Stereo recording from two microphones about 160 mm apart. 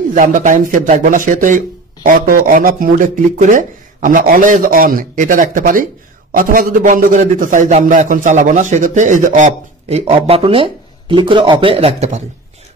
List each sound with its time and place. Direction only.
0.1 s a man's voice: 55° right (ahead or behind)